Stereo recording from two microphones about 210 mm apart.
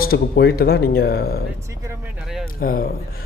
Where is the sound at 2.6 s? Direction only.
45° left (ahead or behind).